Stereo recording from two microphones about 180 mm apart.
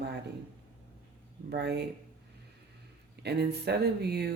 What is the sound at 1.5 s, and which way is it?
Speech, 65° right (ahead or behind).